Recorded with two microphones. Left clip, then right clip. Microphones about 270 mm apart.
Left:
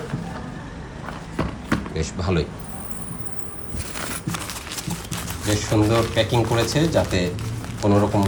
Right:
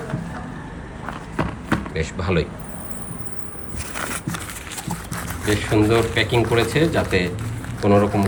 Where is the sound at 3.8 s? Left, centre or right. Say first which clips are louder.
Right 3 dB; centre.